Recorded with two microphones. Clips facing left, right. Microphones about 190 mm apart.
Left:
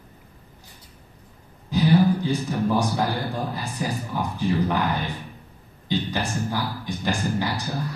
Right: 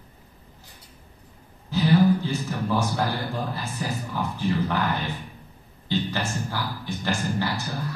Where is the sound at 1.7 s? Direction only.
15° left (ahead or behind).